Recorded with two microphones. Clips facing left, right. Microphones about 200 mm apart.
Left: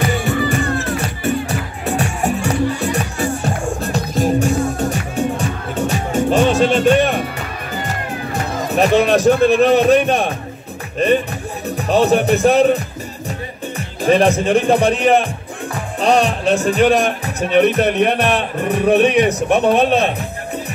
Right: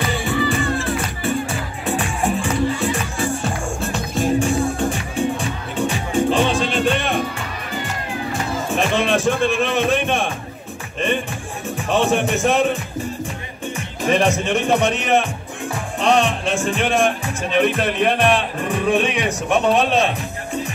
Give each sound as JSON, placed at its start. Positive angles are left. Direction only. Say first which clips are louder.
{"t": 0.2, "sound": "music", "louder": "left 2 dB", "side_deg": 40}
{"t": 8.6, "sound": "speech", "louder": "left 7 dB", "side_deg": 40}
{"t": 18.7, "sound": "a man's voice", "louder": "left 6 dB", "side_deg": 65}